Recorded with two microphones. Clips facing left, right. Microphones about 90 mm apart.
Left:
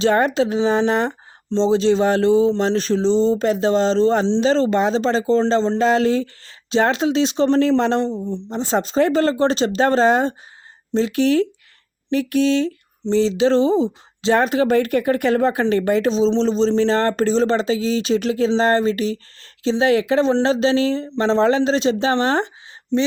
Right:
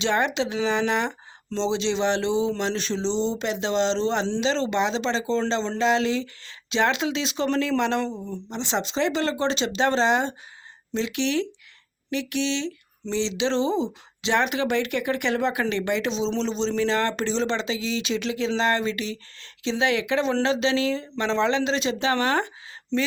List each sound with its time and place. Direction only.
0.0 s speech: 40° left (ahead or behind)
8.5 s speech: 40° left (ahead or behind)